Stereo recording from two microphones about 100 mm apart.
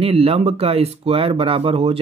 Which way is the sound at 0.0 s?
75° right (ahead or behind).